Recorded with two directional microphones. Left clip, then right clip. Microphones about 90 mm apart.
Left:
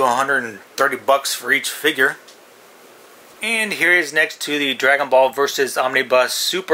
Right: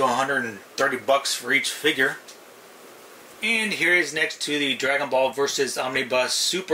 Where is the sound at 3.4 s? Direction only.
35° left (ahead or behind).